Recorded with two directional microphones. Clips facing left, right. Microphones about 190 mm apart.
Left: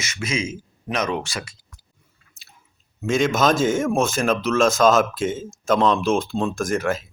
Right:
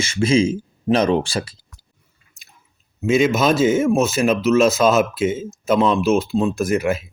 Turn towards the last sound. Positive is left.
turn(degrees=-10)  # may be behind; listen again after turning